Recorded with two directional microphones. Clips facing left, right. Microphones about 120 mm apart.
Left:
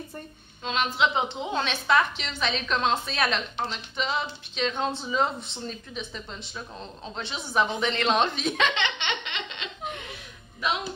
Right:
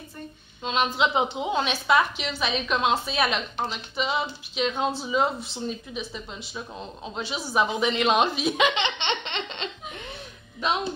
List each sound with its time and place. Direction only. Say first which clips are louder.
0.7 s a woman's voice: right 1 dB; 20° right (ahead or behind)